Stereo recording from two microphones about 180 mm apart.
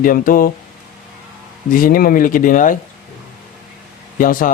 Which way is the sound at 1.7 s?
50° left (ahead or behind).